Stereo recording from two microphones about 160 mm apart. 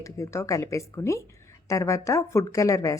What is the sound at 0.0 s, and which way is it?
A woman's voice, 20° left (ahead or behind).